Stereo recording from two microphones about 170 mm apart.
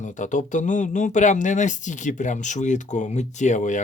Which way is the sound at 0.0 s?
45° left (ahead or behind).